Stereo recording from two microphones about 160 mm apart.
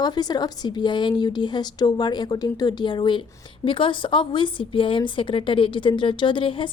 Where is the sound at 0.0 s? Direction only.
25° left (ahead or behind).